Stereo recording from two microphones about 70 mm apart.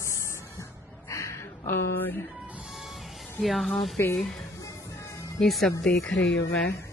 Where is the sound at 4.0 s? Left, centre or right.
Left.